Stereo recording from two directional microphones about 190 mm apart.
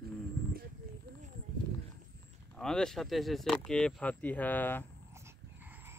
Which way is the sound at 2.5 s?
5° left (ahead or behind).